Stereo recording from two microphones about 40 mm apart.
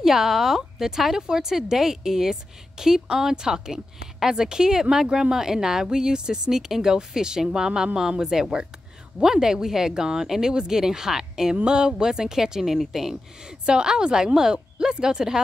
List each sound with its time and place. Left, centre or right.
0.0 s speech: centre